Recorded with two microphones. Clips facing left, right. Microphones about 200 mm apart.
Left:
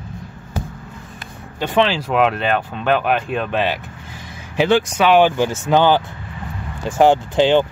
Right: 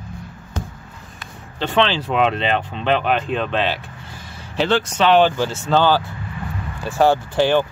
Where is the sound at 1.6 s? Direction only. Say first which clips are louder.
Left 1 dB; 10° left (ahead or behind).